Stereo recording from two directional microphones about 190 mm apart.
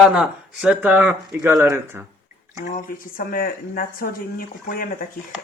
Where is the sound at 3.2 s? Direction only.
50° left (ahead or behind).